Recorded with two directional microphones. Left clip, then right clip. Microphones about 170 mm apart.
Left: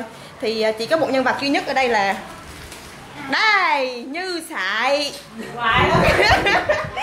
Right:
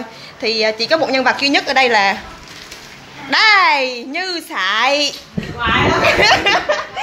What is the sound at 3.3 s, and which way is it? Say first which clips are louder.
A child's voice: right 6 dB; 30° right (ahead or behind).